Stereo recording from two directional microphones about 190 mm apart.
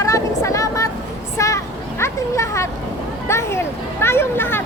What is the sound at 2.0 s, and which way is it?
Speech, 15° left (ahead or behind).